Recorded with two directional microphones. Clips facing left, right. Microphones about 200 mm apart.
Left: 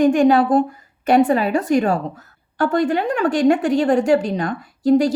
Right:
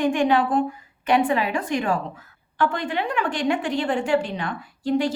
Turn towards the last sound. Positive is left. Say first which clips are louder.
# left 7 dB
turn(degrees=40)  # may be behind; listen again after turning